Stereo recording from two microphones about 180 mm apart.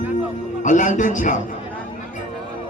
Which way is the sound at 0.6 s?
45° left (ahead or behind).